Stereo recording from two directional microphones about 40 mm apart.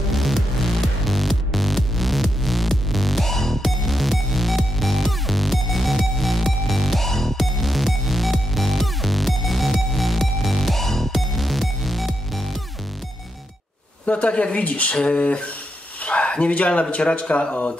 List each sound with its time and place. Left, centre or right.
0.1 s music: centre
14.0 s speech: left